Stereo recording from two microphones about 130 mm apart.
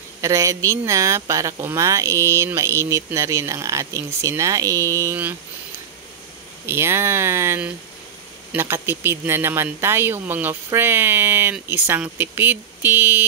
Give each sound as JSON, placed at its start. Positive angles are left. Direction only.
{"t": 0.2, "sound": "speech", "side_deg": -25}
{"t": 6.6, "sound": "speech", "side_deg": -20}